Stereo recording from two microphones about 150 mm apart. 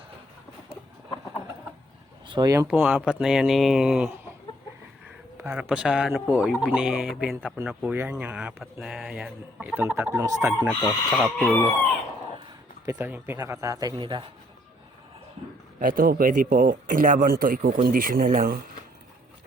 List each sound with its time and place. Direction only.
2.2 s speech: 35° right (ahead or behind)
2.6 s speech: 10° right (ahead or behind)
5.4 s speech: 10° right (ahead or behind)
10.8 s speech: 10° right (ahead or behind)
13.0 s speech: 10° right (ahead or behind); by 14.3 s 30° right (ahead or behind)
15.8 s speech: 75° right (ahead or behind)